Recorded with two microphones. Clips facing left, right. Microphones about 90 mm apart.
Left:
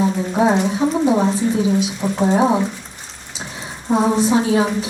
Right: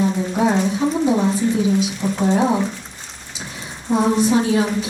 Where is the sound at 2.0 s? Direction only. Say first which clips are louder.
Left 2 dB; 25° left (ahead or behind).